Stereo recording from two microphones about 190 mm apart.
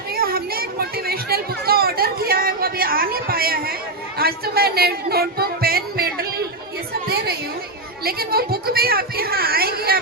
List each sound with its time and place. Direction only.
0.1 s a sound: 50° right (ahead or behind)
4.2 s music: 55° right (ahead or behind)
8.0 s speech: 55° right (ahead or behind)